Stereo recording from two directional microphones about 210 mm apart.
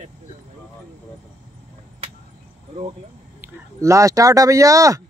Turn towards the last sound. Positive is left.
turn(degrees=-15)  # may be behind; listen again after turning